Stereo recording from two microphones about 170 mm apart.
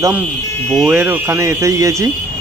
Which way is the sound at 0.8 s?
15° right (ahead or behind).